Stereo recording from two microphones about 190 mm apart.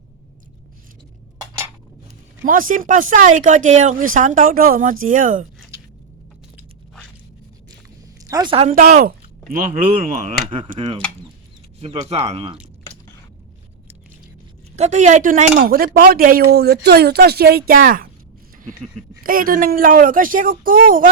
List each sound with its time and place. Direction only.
2.4 s speech: 45° right (ahead or behind)
8.2 s a woman's voice: 20° right (ahead or behind)
8.7 s speech: 45° right (ahead or behind)
10.5 s speech: 30° right (ahead or behind)
14.8 s speech: 40° right (ahead or behind)
19.2 s speech: 50° right (ahead or behind)